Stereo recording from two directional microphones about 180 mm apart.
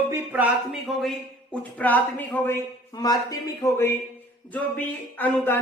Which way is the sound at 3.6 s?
15° left (ahead or behind).